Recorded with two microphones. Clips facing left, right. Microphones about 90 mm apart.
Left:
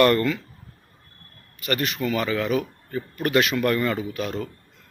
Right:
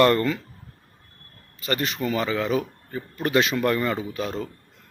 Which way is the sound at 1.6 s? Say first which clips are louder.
Left 1 dB; 30° right (ahead or behind).